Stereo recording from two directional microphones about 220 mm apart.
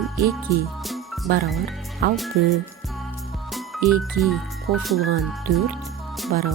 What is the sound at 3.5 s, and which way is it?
Music, centre (ahead or behind).